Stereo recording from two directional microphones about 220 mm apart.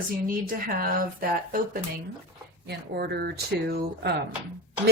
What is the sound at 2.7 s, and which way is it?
Speech, 45° right (ahead or behind).